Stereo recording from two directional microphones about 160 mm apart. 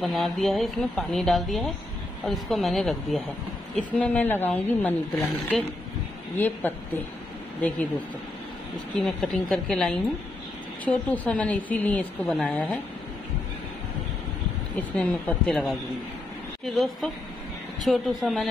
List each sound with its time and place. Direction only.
0.0 s a woman's voice: centre (ahead or behind)
8.9 s a woman's voice: 5° left (ahead or behind)
14.8 s a woman's voice: 10° left (ahead or behind)